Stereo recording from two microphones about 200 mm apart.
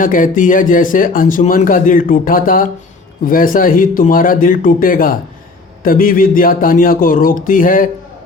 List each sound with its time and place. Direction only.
0.0 s a man's voice: 40° left (ahead or behind)